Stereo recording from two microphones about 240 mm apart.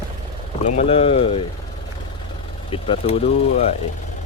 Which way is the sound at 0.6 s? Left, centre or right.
Left.